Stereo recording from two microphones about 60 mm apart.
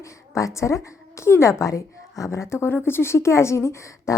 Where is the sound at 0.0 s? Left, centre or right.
Left.